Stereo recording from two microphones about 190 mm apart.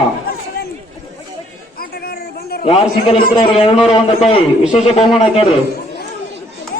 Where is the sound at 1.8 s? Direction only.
55° left (ahead or behind).